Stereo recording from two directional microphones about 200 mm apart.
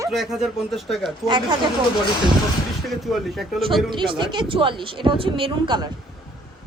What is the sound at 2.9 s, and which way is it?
Speech, centre (ahead or behind).